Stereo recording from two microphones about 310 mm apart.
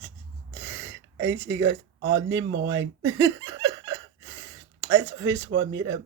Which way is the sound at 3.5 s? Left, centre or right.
Right.